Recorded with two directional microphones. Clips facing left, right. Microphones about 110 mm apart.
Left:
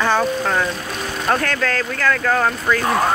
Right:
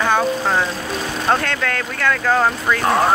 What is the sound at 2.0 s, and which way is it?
Speech, centre (ahead or behind).